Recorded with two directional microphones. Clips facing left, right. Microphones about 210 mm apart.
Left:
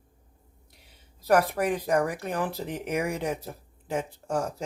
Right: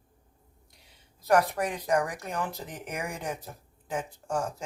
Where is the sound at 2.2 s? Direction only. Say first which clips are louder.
Left 4 dB; 60° left (ahead or behind).